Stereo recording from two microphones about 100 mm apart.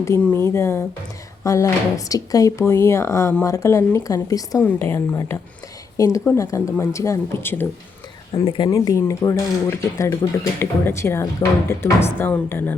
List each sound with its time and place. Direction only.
0.1 s speech: 30° left (ahead or behind)
4.6 s speech: 25° left (ahead or behind)
8.4 s speech: 55° left (ahead or behind)
8.7 s speech: 35° left (ahead or behind)